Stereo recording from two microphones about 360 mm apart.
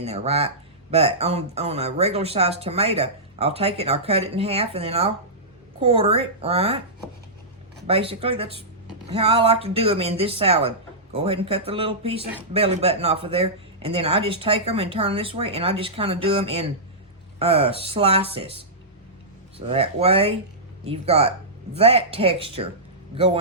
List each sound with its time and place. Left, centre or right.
0.0 s speech: centre
7.9 s speech: centre